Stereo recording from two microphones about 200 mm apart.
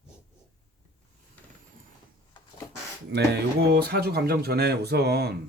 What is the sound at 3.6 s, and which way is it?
Speech, 55° right (ahead or behind).